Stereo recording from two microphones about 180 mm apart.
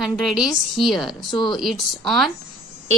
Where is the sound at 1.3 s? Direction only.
25° left (ahead or behind).